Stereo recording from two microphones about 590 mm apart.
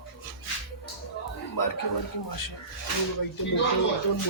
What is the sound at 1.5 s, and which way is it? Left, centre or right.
Speech, left.